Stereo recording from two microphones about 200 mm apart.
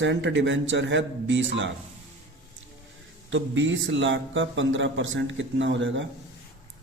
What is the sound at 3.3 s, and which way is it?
A man's voice, 70° right (ahead or behind).